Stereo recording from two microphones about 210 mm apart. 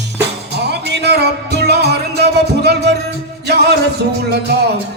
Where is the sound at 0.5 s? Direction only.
50° right (ahead or behind).